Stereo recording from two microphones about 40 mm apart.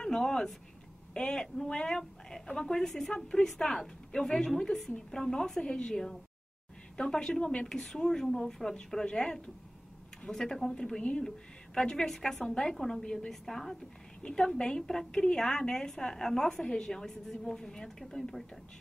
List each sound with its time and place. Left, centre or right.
0.0 s a woman's voice: centre